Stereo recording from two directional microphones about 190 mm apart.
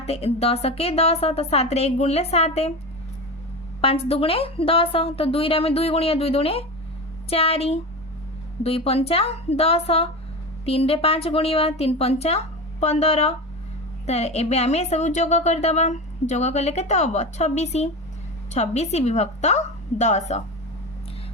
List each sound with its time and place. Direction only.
0.0 s a woman's voice: 30° left (ahead or behind)
3.8 s a woman's voice: 30° left (ahead or behind)